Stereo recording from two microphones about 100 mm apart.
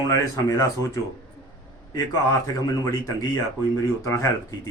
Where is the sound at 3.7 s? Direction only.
30° left (ahead or behind).